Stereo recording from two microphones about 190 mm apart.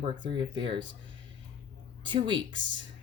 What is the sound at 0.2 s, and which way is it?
Speech, 25° right (ahead or behind).